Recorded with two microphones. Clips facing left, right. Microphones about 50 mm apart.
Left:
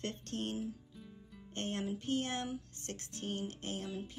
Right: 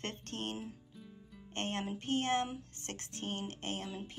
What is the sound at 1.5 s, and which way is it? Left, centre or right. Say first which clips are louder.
Music: even; right.